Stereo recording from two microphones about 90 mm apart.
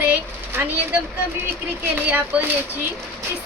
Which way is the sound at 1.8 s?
20° right (ahead or behind).